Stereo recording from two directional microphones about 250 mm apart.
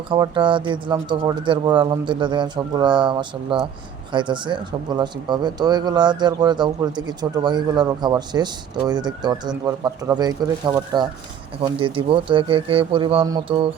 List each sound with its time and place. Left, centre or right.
0.1 s speech: centre